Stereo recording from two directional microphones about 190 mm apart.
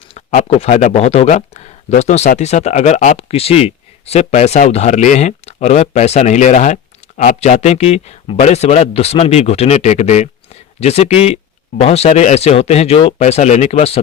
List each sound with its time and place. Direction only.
0.1 s speech: 35° left (ahead or behind)